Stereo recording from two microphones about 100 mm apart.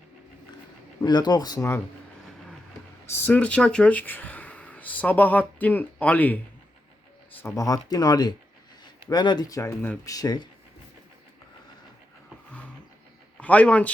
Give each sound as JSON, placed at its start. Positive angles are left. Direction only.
{"t": 1.0, "sound": "speech", "side_deg": 45}
{"t": 3.1, "sound": "speech", "side_deg": 20}
{"t": 7.4, "sound": "speech", "side_deg": 35}
{"t": 9.5, "sound": "speech", "side_deg": 30}
{"t": 10.1, "sound": "speech", "side_deg": 40}
{"t": 13.4, "sound": "speech", "side_deg": 15}